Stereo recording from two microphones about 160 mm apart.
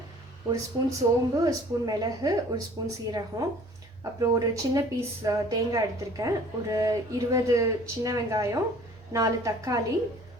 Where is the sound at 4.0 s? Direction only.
20° right (ahead or behind).